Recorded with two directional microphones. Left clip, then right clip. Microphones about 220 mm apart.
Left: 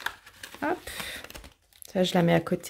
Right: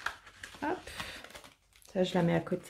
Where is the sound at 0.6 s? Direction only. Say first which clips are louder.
Left 6 dB; 40° left (ahead or behind).